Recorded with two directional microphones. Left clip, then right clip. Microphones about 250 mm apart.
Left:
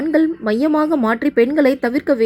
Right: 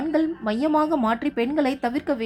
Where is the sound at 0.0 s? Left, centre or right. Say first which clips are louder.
Left 7 dB; centre.